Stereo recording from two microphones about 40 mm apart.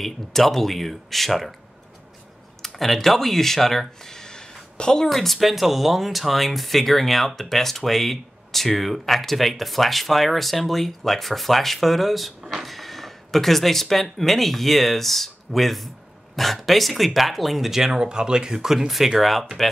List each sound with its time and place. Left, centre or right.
0.0 s speech: centre
2.6 s speech: centre
4.0 s a sound: centre
5.1 s speech: centre
18.0 s speech: centre